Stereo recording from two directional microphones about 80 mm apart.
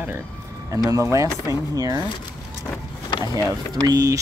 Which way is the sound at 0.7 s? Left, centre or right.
Right.